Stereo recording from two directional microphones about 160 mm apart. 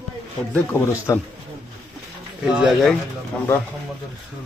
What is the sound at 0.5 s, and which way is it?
Speech, 15° left (ahead or behind).